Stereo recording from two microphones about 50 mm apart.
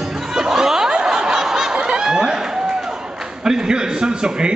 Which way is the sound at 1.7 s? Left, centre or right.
Centre.